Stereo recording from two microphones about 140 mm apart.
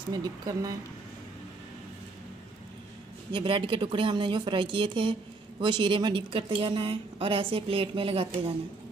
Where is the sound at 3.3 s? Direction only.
40° right (ahead or behind).